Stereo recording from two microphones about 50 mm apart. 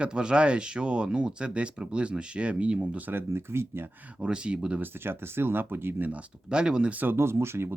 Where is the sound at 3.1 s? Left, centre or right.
Right.